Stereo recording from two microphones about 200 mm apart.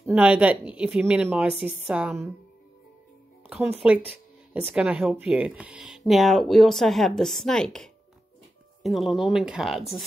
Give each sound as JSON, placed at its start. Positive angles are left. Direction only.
{"t": 0.0, "sound": "speech", "side_deg": -5}
{"t": 3.4, "sound": "speech", "side_deg": -5}